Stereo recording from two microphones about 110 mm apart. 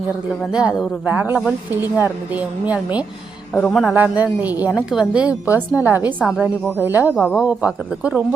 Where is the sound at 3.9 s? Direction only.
15° right (ahead or behind).